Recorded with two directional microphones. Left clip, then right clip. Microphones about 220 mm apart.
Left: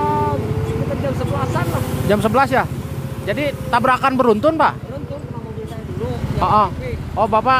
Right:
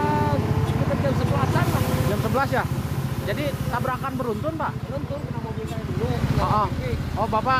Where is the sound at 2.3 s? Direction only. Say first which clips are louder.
Left 8 dB; 30° left (ahead or behind).